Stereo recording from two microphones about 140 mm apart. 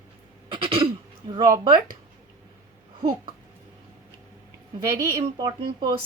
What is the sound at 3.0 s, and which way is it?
Speech, 35° right (ahead or behind).